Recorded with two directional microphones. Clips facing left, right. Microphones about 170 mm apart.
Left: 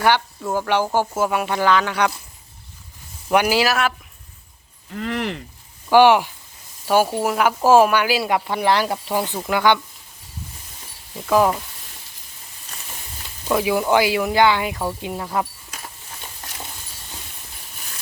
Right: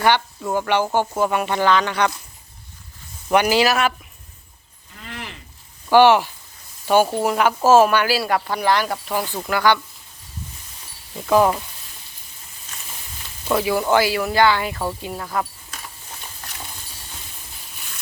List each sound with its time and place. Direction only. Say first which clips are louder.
0.0 s speech: even; 5° left (ahead or behind)
3.2 s speech: right 1 dB; 5° left (ahead or behind)
4.9 s speech: left 11 dB; 75° left (ahead or behind)
5.9 s speech: even; 10° left (ahead or behind)
11.3 s speech: right 1 dB; centre (ahead or behind)
13.5 s speech: even; 10° left (ahead or behind)